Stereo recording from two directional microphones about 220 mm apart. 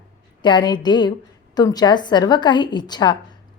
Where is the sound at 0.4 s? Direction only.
20° left (ahead or behind).